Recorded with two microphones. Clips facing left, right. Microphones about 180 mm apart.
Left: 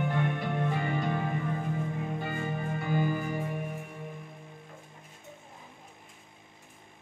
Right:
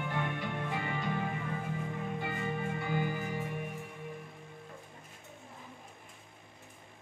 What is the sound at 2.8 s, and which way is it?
Music, 45° left (ahead or behind).